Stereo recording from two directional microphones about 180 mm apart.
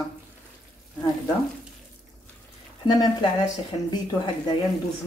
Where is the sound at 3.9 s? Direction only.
25° left (ahead or behind).